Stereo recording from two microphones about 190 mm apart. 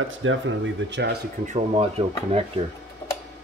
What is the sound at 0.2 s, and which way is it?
Speech, 90° right.